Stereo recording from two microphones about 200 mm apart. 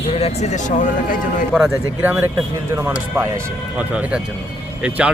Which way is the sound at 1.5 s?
5° right (ahead or behind).